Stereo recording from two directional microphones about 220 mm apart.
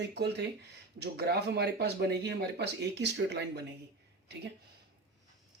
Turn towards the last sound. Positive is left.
turn(degrees=-50)  # may be behind; listen again after turning